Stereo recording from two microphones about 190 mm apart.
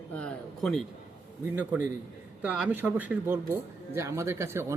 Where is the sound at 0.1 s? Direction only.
5° left (ahead or behind).